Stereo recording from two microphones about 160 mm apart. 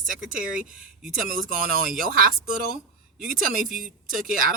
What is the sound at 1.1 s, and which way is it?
Speech, 60° right (ahead or behind).